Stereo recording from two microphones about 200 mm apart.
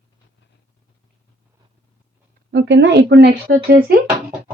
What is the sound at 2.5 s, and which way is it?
Speech, 65° right (ahead or behind).